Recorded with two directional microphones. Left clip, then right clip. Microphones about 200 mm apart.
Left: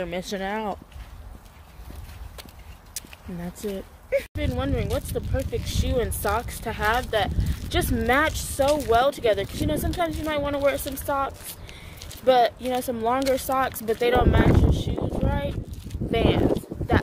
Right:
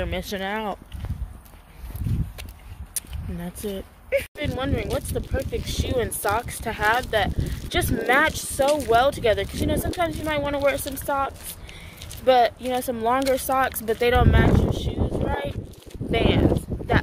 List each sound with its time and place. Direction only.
0.0 s speech: 5° left (ahead or behind)
2.9 s speech: centre (ahead or behind)
16.1 s a sound: centre (ahead or behind)